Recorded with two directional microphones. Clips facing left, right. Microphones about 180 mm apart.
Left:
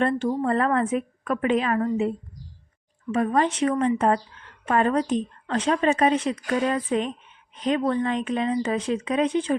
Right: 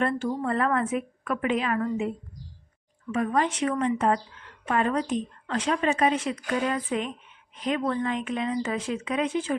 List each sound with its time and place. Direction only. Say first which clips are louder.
0.0 s a woman's voice: left 4 dB; 35° left (ahead or behind)